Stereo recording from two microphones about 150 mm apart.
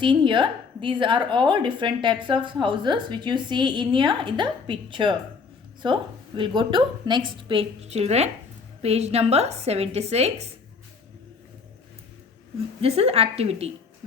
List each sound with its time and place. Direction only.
0.0 s a woman's voice: 30° right (ahead or behind)
12.8 s a woman's voice: 40° right (ahead or behind)